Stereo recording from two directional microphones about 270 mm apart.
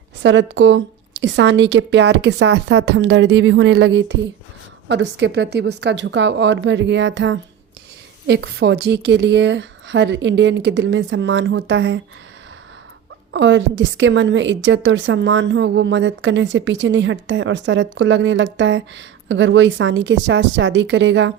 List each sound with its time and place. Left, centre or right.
0.2 s a woman's voice: right
13.3 s a woman's voice: right